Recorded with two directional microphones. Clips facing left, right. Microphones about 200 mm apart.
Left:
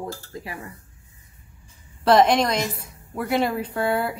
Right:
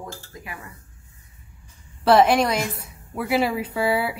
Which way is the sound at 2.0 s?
5° right (ahead or behind).